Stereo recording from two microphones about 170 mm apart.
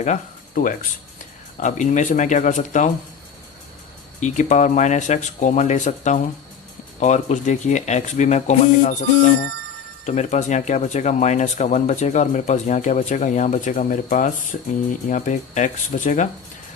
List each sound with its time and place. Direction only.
0.0 s speech: 50° left (ahead or behind)
4.2 s speech: 45° left (ahead or behind)